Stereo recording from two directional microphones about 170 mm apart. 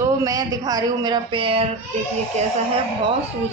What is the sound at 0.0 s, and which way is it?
Speech, 20° right (ahead or behind).